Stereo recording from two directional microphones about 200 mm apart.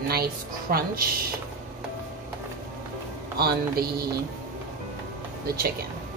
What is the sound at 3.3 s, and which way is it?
Speech, 50° right (ahead or behind).